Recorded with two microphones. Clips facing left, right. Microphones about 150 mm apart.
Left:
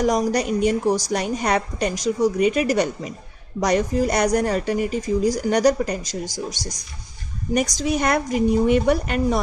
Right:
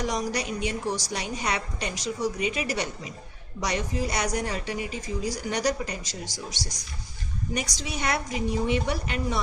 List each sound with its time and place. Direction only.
0.0 s a woman's voice: 45° left (ahead or behind)